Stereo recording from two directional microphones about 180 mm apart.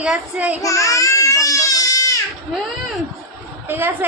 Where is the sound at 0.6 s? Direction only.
20° left (ahead or behind).